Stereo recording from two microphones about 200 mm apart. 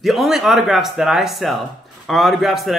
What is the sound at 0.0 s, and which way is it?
A man's voice, centre (ahead or behind).